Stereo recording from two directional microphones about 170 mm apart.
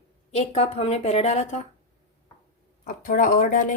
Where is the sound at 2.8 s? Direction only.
55° left (ahead or behind).